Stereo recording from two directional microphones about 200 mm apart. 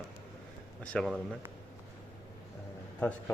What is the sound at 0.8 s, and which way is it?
Speech, 5° left (ahead or behind).